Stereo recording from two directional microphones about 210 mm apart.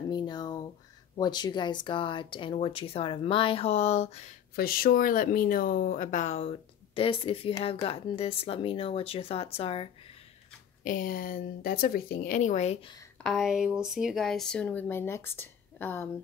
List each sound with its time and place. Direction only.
0.1 s a sound: 20° left (ahead or behind)
1.1 s speech: 20° left (ahead or behind)
4.6 s speech: 45° left (ahead or behind); by 9.8 s 25° left (ahead or behind)
10.8 s a woman's voice: 40° left (ahead or behind)
13.2 s speech: centre (ahead or behind)